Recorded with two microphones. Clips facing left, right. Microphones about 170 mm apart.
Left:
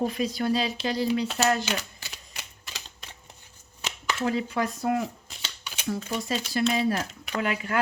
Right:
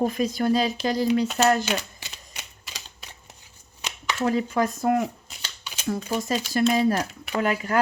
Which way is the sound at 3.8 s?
15° right (ahead or behind).